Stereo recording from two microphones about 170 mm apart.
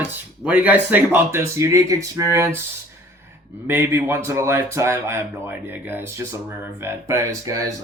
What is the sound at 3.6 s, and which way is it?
A man's voice, 10° right (ahead or behind).